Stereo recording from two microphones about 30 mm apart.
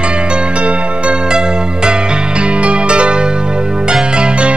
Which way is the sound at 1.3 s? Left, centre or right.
Right.